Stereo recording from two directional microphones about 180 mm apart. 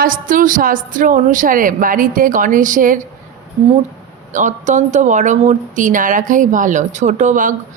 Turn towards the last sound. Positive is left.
turn(degrees=-45)  # may be behind; listen again after turning